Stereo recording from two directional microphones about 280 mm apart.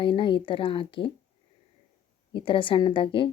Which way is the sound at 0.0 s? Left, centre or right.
Centre.